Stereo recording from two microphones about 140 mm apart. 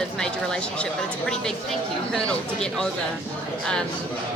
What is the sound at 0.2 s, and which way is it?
Speech, 5° left (ahead or behind).